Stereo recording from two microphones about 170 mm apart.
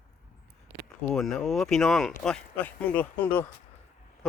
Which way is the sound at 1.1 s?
Centre (ahead or behind).